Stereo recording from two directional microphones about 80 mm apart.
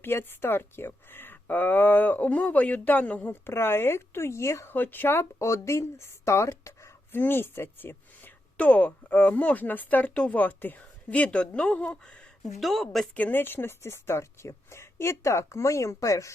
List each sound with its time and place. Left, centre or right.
0.0 s speech: left
4.7 s speech: left
7.1 s speech: left; by 13.1 s centre
13.1 s speech: left